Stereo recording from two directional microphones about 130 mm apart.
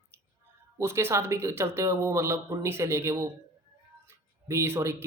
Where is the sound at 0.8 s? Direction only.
20° right (ahead or behind).